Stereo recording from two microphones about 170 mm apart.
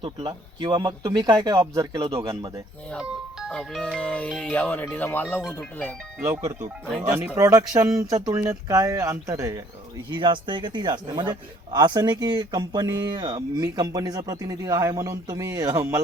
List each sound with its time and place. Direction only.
0.0 s speech: 30° right (ahead or behind)
3.0 s speech: 5° right (ahead or behind); by 5.9 s 15° left (ahead or behind)
6.1 s speech: 10° right (ahead or behind)